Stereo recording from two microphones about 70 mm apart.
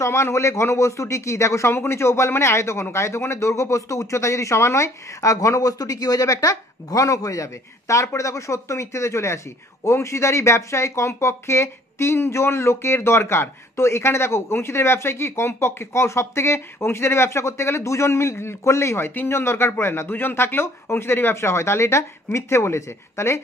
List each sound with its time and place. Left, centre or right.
0.0 s a man's voice: left